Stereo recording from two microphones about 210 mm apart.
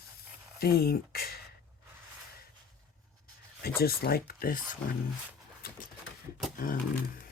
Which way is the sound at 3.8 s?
45° left (ahead or behind).